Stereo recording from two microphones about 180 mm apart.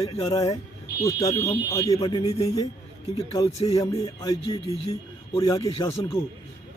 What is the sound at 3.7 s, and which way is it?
A man's voice, 20° left (ahead or behind).